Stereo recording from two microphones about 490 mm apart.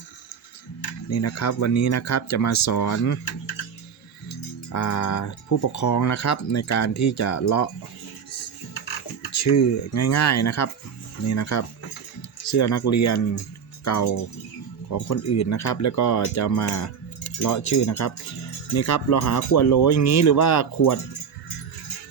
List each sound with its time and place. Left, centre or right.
1.1 s speech: left
4.3 s speech: left
9.3 s speech: left